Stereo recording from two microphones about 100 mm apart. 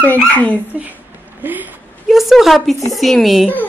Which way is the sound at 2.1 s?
Centre (ahead or behind).